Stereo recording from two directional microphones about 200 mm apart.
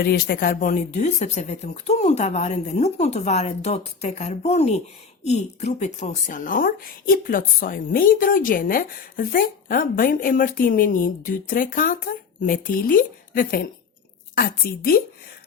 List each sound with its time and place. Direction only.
0.0 s a woman's voice: 50° left (ahead or behind)